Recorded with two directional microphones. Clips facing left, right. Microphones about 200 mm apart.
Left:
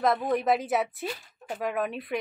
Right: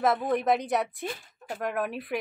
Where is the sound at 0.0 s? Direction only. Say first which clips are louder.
Even; centre (ahead or behind).